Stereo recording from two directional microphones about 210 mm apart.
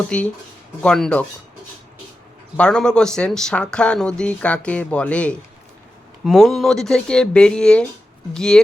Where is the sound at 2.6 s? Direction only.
5° left (ahead or behind).